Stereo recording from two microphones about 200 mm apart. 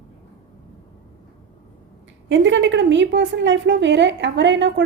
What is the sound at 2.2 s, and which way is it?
A woman's voice, 65° right (ahead or behind).